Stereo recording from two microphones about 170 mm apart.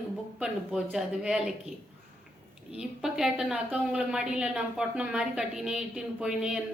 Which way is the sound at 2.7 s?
5° right (ahead or behind).